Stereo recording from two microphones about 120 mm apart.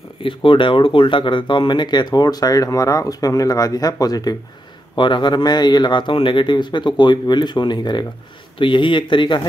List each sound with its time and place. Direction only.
0.2 s speech: 45° left (ahead or behind)